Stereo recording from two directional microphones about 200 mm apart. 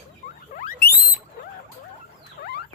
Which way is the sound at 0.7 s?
50° left (ahead or behind).